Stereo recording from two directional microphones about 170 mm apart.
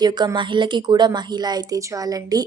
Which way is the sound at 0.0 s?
25° right (ahead or behind).